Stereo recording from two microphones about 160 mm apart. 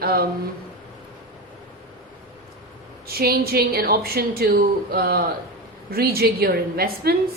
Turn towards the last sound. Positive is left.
turn(degrees=-70)  # may be behind; listen again after turning